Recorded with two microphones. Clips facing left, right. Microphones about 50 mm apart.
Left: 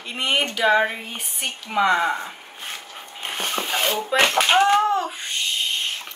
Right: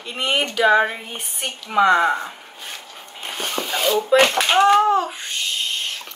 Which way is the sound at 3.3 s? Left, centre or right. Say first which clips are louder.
Even; left.